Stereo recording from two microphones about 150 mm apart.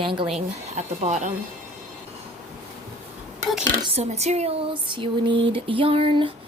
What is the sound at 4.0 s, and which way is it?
Speech, 45° right (ahead or behind).